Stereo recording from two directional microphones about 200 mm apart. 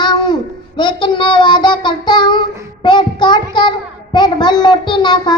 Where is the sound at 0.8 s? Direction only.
25° left (ahead or behind).